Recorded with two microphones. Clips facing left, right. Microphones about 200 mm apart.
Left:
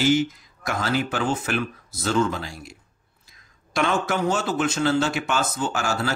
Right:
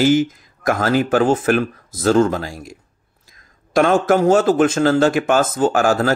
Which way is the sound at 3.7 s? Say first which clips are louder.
Right 9 dB; 45° right (ahead or behind).